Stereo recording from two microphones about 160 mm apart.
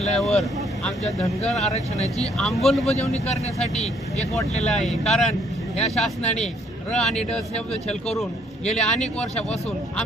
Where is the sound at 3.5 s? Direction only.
45° left (ahead or behind).